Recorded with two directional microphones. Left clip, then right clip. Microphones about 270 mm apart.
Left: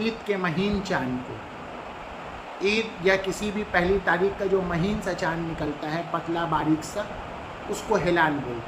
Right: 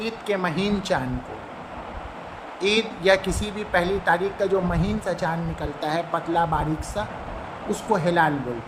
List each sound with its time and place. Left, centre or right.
0.0 s a woman's voice: right
2.6 s a woman's voice: right